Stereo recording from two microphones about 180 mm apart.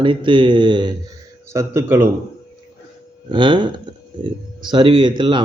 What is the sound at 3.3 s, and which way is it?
Speech, 25° right (ahead or behind).